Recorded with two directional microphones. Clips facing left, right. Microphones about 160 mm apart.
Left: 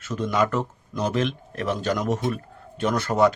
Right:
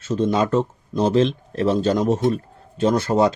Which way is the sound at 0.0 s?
25° right (ahead or behind).